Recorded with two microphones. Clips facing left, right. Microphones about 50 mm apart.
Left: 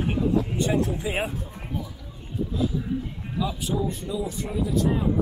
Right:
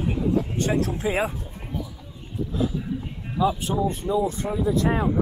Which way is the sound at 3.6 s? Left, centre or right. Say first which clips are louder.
Right 3 dB; right.